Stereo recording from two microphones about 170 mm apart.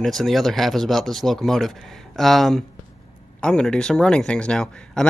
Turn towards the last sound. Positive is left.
turn(degrees=5)  # may be behind; listen again after turning